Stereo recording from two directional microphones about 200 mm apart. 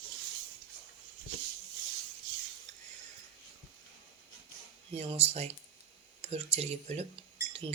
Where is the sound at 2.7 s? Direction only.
35° right (ahead or behind).